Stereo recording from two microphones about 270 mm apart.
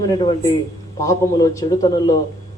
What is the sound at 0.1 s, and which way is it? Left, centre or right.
A man's voice, centre.